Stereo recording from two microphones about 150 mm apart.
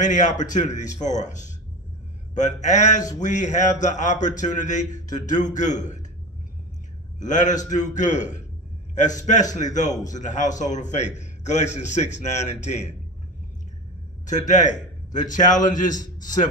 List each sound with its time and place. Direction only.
0.1 s speech: 55° left (ahead or behind)
7.2 s a man's voice: 55° left (ahead or behind)
14.2 s speech: 55° left (ahead or behind)